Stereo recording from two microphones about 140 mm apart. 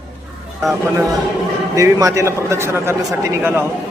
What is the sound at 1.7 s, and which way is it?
A man's voice, 25° right (ahead or behind).